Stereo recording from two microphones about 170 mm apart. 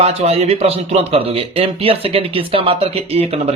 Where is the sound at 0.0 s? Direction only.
35° right (ahead or behind).